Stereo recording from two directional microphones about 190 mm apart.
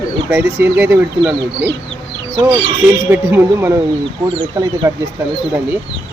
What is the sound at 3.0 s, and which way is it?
Speech, 10° right (ahead or behind).